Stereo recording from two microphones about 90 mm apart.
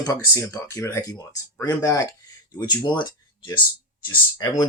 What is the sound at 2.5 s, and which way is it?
Speech, 50° left (ahead or behind).